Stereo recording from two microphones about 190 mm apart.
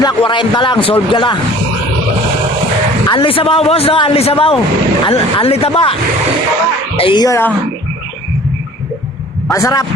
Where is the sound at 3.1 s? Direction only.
30° left (ahead or behind).